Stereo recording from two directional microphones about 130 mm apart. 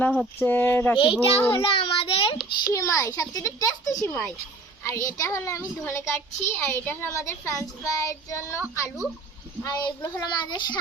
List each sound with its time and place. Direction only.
0.0 s a sound: 10° left (ahead or behind)
0.9 s a child's voice: 40° left (ahead or behind)
1.5 s a sound: 40° left (ahead or behind)
2.7 s a child's voice: 25° left (ahead or behind)
9.6 s a child's voice: 25° left (ahead or behind)
10.2 s a child's voice: 35° left (ahead or behind)